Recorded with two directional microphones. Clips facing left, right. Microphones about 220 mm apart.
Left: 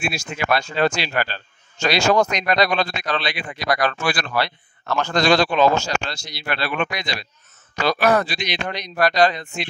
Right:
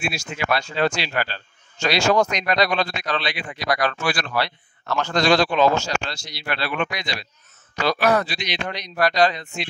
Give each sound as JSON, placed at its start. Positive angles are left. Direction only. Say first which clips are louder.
{"t": 0.0, "sound": "a man's voice", "louder": "left 1 dB", "side_deg": 50}